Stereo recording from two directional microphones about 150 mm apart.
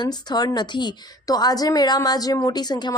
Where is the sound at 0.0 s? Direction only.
30° left (ahead or behind).